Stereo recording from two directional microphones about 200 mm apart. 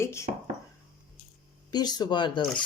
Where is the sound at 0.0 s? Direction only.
15° left (ahead or behind).